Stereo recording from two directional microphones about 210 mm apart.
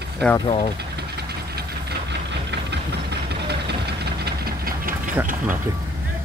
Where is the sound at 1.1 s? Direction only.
50° right (ahead or behind).